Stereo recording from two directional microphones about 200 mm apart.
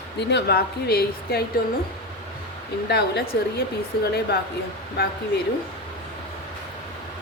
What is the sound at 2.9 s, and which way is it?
Speech, 55° left (ahead or behind).